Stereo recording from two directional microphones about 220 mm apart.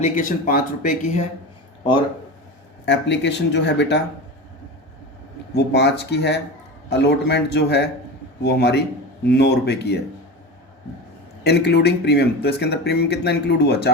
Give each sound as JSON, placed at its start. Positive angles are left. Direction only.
{"t": 0.0, "sound": "speech", "side_deg": 35}
{"t": 2.8, "sound": "speech", "side_deg": 55}
{"t": 5.5, "sound": "speech", "side_deg": 50}
{"t": 11.4, "sound": "speech", "side_deg": 50}